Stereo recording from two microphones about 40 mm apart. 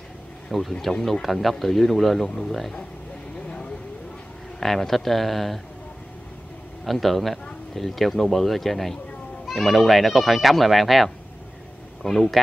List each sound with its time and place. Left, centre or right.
0.5 s speech: centre
2.2 s speech: centre
3.4 s vehicle: left
4.6 s speech: centre
6.8 s speech: centre
12.0 s speech: centre